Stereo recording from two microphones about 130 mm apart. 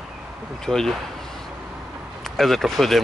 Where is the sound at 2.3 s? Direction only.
Centre (ahead or behind).